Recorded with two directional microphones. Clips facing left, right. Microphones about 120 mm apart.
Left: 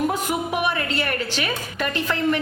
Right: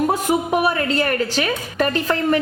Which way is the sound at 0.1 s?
40° right (ahead or behind).